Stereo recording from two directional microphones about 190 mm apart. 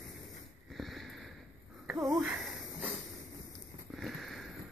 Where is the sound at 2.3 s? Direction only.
5° right (ahead or behind).